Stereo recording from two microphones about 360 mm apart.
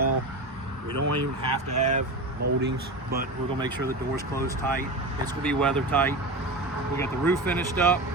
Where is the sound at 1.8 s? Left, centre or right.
Right.